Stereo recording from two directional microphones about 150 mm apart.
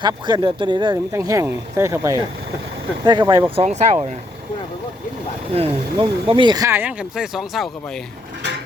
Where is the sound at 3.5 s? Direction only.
45° right (ahead or behind).